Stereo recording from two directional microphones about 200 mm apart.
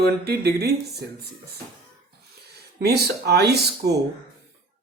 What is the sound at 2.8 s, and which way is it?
Speech, 55° right (ahead or behind).